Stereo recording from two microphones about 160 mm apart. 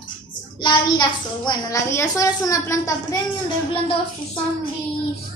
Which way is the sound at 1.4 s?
20° left (ahead or behind).